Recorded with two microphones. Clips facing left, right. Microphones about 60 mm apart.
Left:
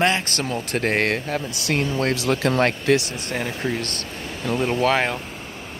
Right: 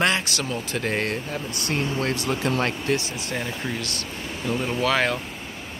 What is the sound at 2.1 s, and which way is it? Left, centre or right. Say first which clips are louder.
Speech: left 4 dB; left.